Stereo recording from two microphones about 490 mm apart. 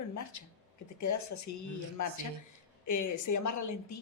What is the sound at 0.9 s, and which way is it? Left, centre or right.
Speech, left.